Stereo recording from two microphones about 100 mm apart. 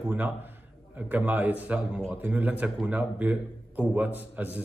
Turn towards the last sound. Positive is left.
turn(degrees=-15)  # may be behind; listen again after turning